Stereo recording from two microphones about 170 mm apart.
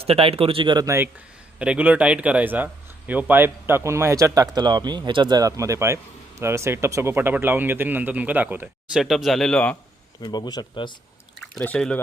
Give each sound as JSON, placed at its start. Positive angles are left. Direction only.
{"t": 0.0, "sound": "speech", "side_deg": -35}
{"t": 10.2, "sound": "speech", "side_deg": 25}
{"t": 11.5, "sound": "speech", "side_deg": 5}